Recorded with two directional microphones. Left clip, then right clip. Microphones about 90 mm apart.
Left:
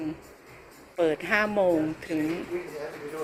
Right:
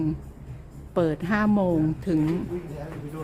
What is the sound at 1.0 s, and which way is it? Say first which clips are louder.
Speech: left 4 dB; 30° right (ahead or behind).